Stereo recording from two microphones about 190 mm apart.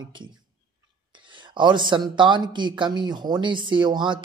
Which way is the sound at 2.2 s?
25° right (ahead or behind).